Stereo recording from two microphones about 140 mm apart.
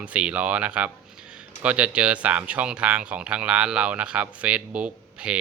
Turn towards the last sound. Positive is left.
turn(degrees=-5)  # may be behind; listen again after turning